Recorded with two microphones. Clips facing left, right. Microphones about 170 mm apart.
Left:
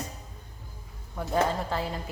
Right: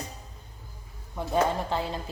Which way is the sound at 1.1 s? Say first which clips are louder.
Right 1 dB; 20° right (ahead or behind).